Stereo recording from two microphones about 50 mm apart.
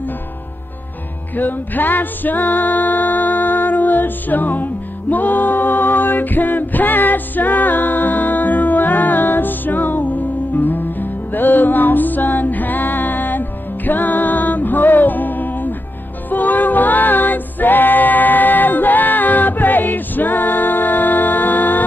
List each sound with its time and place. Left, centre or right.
1.3 s music: left
5.1 s a capella: left
16.3 s music: left